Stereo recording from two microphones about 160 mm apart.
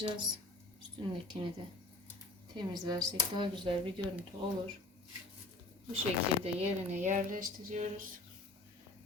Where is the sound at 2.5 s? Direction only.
25° right (ahead or behind).